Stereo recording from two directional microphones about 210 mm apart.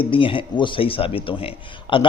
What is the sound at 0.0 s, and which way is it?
Speech, 25° left (ahead or behind).